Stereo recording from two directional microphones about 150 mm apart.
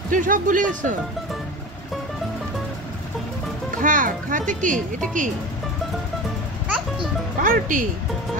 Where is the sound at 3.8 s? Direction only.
65° right (ahead or behind).